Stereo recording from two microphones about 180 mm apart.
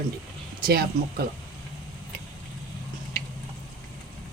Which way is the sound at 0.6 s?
55° right (ahead or behind).